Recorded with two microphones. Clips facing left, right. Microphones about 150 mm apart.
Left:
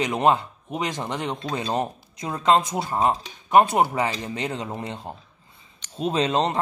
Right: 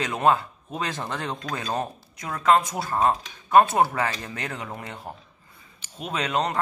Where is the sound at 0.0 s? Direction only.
20° left (ahead or behind).